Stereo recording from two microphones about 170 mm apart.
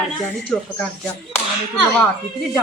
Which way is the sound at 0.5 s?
5° left (ahead or behind).